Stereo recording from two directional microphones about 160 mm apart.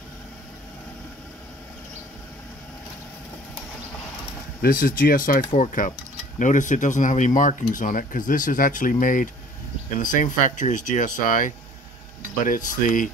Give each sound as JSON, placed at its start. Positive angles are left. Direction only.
{"t": 4.6, "sound": "speech", "side_deg": 65}